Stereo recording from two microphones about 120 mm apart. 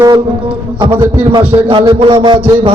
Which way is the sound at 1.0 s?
40° right (ahead or behind).